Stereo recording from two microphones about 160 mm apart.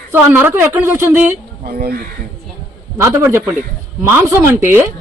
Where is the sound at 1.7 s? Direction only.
70° right (ahead or behind).